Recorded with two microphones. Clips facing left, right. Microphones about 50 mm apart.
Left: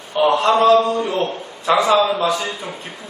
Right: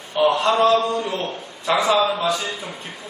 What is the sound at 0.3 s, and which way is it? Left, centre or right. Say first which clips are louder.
A man's voice: left 4 dB; centre.